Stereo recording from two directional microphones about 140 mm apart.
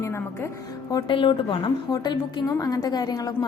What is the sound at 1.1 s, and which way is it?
A woman's voice, 35° left (ahead or behind).